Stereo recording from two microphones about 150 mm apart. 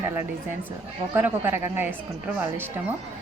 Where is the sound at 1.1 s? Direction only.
10° right (ahead or behind).